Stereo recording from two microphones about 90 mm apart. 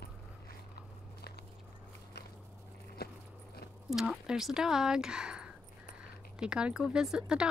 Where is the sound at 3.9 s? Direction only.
5° right (ahead or behind).